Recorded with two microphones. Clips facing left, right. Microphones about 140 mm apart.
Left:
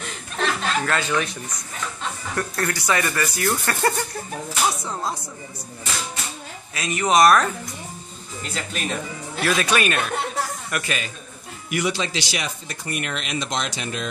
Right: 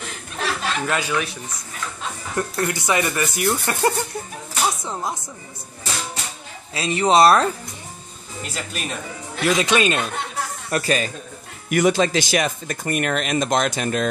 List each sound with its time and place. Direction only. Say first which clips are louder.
0.4 s chuckle: left 1 dB; 10° right (ahead or behind)
2.3 s speech: right 3 dB; 20° right (ahead or behind)
6.7 s speech: right 3 dB; 30° right (ahead or behind)
8.5 s speech: left 2 dB; 5° right (ahead or behind)
9.4 s speech: right 3 dB; 20° right (ahead or behind)
10.7 s speech: right 6 dB; 35° right (ahead or behind)
11.7 s speech: right 7 dB; 50° right (ahead or behind)